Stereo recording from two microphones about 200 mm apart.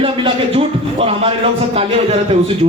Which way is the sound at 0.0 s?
25° right (ahead or behind).